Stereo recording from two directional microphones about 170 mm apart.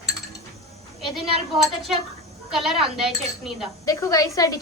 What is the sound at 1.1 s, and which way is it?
Speech, centre (ahead or behind).